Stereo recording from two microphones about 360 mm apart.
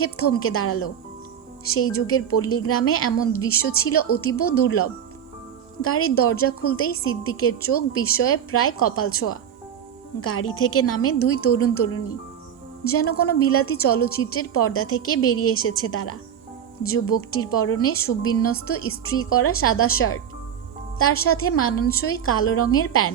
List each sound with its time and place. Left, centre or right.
0.0 s a woman's voice: left
21.2 s a woman's voice: left